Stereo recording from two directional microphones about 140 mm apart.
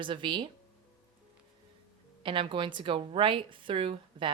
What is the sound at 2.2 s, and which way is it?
A woman's voice, 35° right (ahead or behind).